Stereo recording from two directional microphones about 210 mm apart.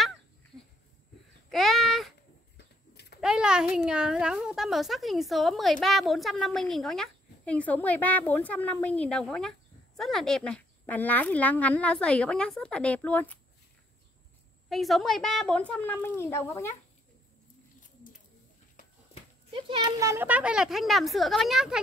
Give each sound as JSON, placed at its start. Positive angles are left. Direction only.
{"t": 1.5, "sound": "babbling", "side_deg": 0}
{"t": 2.5, "sound": "a sound", "side_deg": 50}
{"t": 3.2, "sound": "a child's voice", "side_deg": -5}
{"t": 14.7, "sound": "a child's voice", "side_deg": 0}
{"t": 19.5, "sound": "a child's voice", "side_deg": -20}